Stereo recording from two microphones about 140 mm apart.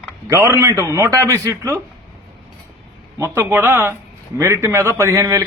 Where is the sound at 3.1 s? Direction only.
15° right (ahead or behind).